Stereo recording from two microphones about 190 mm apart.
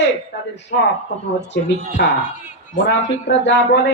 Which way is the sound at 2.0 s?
60° left (ahead or behind).